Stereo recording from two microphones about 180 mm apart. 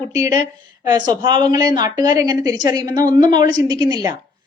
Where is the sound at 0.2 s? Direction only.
20° right (ahead or behind).